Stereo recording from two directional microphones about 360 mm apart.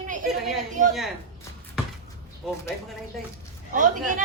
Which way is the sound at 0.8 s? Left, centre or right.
Right.